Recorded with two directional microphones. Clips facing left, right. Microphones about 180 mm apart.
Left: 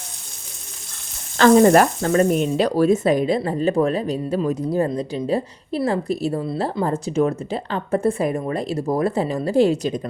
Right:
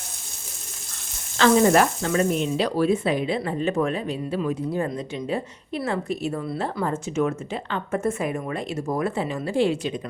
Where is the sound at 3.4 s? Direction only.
35° left (ahead or behind).